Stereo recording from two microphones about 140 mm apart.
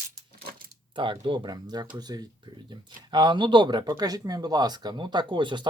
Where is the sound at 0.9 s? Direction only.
35° right (ahead or behind).